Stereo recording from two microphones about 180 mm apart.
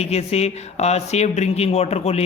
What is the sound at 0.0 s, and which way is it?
A man's voice, 35° left (ahead or behind).